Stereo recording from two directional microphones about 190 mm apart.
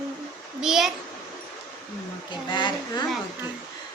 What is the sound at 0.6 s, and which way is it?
Speech, centre (ahead or behind).